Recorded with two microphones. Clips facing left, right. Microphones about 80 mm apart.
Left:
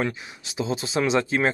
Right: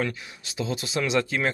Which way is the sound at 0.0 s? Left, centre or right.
Left.